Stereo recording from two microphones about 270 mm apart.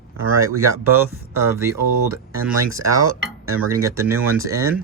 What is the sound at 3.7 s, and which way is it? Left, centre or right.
Speech, centre.